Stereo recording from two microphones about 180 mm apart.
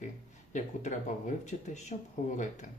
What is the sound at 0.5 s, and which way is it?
Speech, 45° left (ahead or behind).